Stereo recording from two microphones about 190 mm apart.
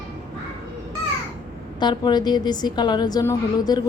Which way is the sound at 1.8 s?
25° left (ahead or behind).